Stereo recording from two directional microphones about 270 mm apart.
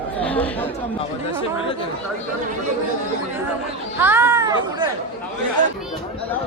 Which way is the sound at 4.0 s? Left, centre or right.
Centre.